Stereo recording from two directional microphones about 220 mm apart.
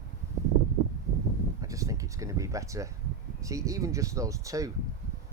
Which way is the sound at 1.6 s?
15° right (ahead or behind).